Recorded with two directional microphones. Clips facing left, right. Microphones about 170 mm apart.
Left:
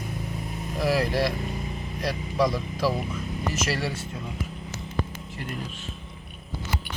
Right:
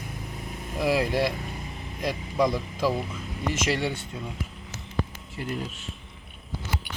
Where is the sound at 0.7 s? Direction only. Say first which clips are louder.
Even; 15° right (ahead or behind).